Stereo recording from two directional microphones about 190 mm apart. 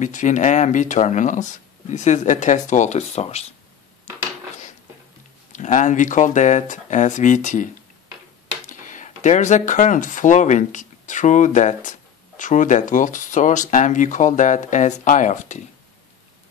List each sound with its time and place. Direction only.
0.0 s speech: 40° left (ahead or behind)
5.5 s speech: 40° left (ahead or behind)
8.6 s speech: 40° left (ahead or behind)